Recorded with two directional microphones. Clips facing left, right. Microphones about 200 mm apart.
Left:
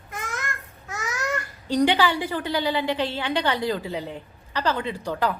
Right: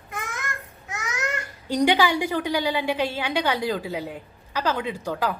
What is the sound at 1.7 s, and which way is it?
A woman's voice, 15° right (ahead or behind).